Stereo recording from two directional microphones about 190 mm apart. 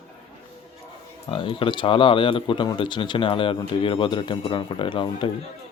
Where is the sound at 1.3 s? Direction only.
25° left (ahead or behind).